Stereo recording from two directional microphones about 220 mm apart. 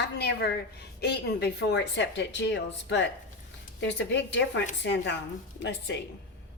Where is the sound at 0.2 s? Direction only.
50° left (ahead or behind).